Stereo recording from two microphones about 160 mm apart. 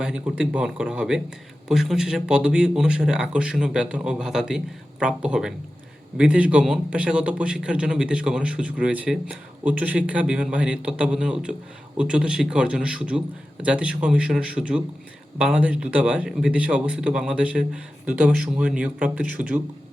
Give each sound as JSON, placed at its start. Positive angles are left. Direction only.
{"t": 0.0, "sound": "a man's voice", "side_deg": -5}